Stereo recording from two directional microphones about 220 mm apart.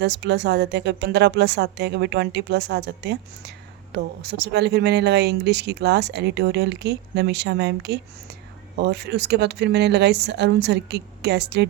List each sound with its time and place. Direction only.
0.0 s speech: 50° right (ahead or behind)